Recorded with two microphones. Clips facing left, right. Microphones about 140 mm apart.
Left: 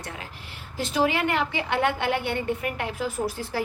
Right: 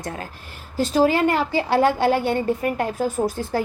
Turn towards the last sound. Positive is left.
turn(degrees=-40)  # may be behind; listen again after turning